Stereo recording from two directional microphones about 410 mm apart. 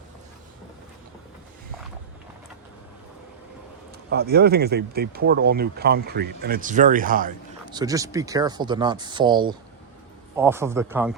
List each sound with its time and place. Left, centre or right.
4.1 s speech: right; by 11.1 s centre